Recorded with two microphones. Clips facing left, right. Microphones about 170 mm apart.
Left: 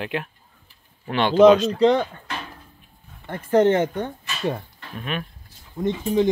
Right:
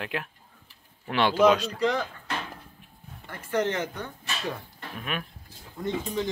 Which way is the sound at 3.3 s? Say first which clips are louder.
Left 10 dB; 30° left (ahead or behind).